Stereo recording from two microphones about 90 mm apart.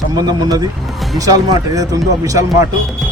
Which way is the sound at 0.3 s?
45° right (ahead or behind).